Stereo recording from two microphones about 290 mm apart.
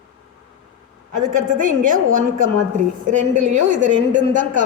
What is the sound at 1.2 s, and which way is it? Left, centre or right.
A woman's voice, right.